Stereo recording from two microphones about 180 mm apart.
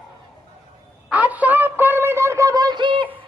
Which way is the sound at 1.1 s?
10° right (ahead or behind).